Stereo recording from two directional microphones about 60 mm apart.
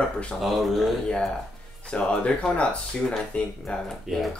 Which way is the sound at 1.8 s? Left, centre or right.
Centre.